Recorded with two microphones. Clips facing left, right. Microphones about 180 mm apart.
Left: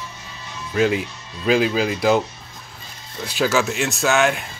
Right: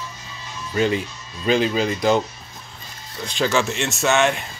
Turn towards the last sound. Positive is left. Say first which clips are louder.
# even
turn(degrees=0)  # may be behind; listen again after turning